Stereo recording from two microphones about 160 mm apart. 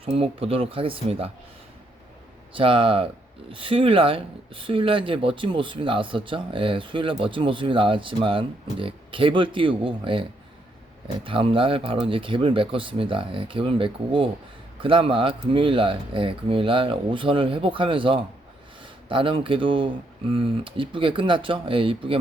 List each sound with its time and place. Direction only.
0.0 s speech: 35° right (ahead or behind)
2.5 s speech: 35° right (ahead or behind)